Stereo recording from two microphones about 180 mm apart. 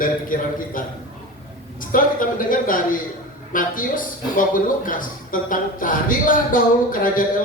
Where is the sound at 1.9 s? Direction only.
50° left (ahead or behind).